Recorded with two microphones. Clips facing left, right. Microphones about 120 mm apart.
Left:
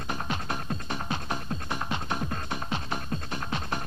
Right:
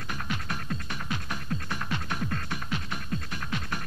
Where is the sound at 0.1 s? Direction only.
30° left (ahead or behind).